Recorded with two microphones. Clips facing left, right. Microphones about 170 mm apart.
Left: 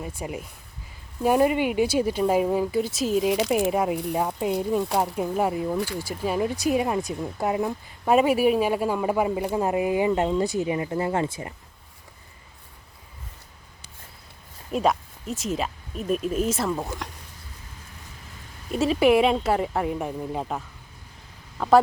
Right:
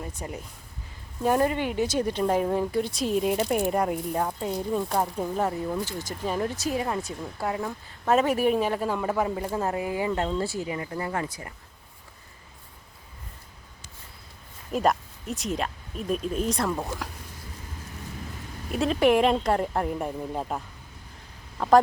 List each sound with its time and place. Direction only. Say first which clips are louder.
0.0 s speech: left 3 dB; 10° left (ahead or behind)
3.2 s speech: left 2 dB; 90° left
3.7 s speech: left 2 dB; 5° left (ahead or behind); by 11.5 s 25° left (ahead or behind)
14.7 s speech: left 1 dB; centre (ahead or behind)
18.7 s speech: left 2 dB; 5° left (ahead or behind)
21.6 s speech: left 1 dB; centre (ahead or behind)